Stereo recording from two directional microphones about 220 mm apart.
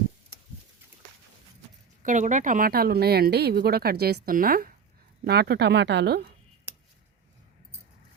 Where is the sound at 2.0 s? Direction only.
35° right (ahead or behind).